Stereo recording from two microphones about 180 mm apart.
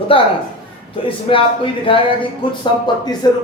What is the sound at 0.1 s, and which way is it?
Speech, 30° left (ahead or behind).